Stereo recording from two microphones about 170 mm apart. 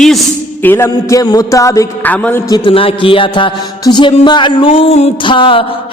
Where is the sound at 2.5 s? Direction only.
30° left (ahead or behind).